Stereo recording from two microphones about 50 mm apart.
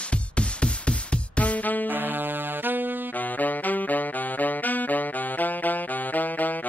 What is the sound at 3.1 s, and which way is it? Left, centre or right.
Saxophone, left.